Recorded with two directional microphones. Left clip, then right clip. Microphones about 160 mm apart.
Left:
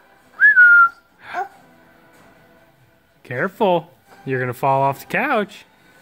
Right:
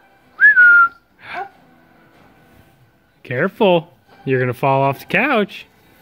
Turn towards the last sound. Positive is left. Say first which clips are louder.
# right 3 dB
turn(degrees=0)  # may be behind; listen again after turning